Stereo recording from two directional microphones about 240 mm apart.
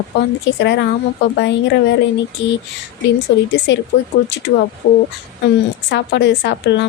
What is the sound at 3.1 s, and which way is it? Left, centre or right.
Speech, left.